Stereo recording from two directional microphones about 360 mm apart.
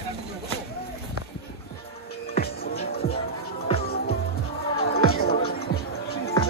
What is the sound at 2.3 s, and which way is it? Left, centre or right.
Music, left.